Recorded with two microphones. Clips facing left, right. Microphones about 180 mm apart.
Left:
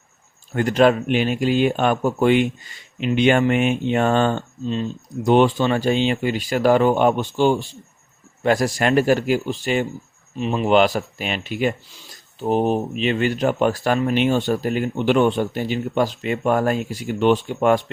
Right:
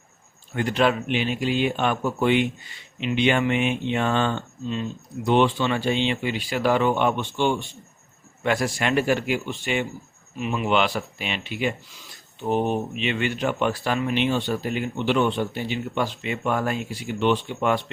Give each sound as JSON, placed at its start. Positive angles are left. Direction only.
{"t": 0.5, "sound": "speech", "side_deg": 45}